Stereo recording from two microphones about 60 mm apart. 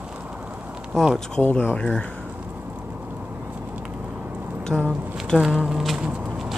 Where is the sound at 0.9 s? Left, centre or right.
Centre.